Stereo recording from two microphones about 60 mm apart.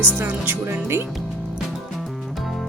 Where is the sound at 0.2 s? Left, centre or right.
Right.